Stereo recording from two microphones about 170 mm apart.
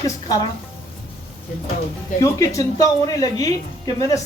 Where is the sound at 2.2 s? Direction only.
20° left (ahead or behind).